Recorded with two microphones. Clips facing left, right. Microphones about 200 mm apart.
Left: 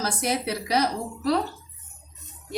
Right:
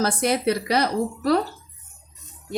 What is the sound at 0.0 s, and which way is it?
A woman's voice, 60° right (ahead or behind).